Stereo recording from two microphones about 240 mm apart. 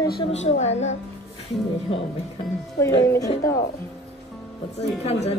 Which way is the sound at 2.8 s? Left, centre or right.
Centre.